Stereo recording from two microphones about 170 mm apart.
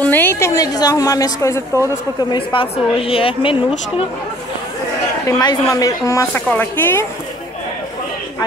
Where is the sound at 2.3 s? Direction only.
30° left (ahead or behind).